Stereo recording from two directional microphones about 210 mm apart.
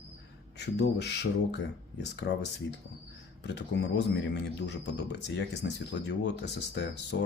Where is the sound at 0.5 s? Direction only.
50° left (ahead or behind).